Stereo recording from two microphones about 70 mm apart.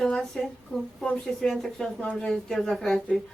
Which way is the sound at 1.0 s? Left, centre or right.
Centre.